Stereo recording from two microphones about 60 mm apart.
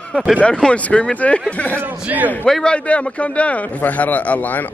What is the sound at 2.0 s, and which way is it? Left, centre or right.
Speech, right.